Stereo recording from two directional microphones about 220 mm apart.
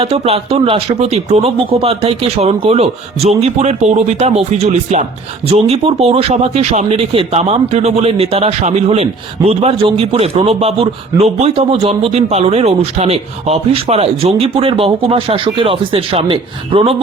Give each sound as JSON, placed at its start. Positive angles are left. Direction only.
{"t": 0.0, "sound": "a man's voice", "side_deg": -25}